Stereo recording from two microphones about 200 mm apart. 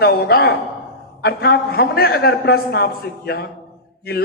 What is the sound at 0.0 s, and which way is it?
A man's voice, 50° left (ahead or behind).